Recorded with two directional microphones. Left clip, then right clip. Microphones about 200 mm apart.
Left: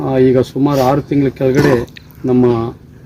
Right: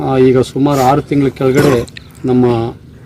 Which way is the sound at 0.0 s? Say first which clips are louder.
Right 2 dB; 5° left (ahead or behind).